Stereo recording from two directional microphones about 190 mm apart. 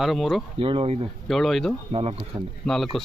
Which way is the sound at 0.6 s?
30° right (ahead or behind).